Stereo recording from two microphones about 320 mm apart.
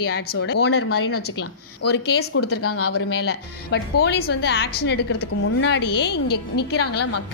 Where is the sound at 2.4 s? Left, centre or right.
Left.